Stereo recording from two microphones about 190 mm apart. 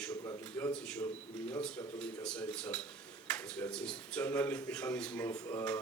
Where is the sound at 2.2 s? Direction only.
5° left (ahead or behind).